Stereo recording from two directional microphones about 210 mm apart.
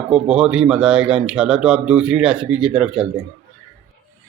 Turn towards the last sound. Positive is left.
turn(degrees=-5)  # may be behind; listen again after turning